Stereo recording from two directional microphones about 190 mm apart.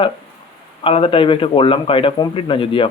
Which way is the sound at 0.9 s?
30° left (ahead or behind).